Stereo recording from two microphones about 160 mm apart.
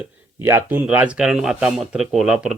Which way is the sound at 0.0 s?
15° right (ahead or behind).